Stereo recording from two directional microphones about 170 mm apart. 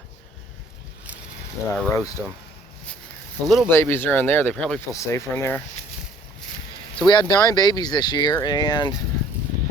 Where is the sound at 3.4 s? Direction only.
Centre (ahead or behind).